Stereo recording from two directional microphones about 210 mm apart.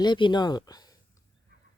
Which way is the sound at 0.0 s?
20° left (ahead or behind).